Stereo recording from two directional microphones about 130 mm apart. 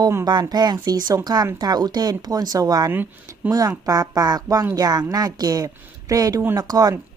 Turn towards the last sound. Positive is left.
turn(degrees=-30)  # may be behind; listen again after turning